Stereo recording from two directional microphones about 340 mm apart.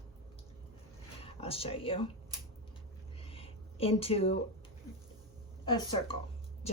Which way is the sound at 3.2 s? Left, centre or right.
Centre.